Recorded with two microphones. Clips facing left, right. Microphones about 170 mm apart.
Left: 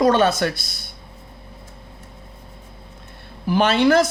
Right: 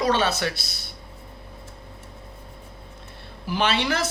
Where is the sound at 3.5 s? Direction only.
50° left (ahead or behind).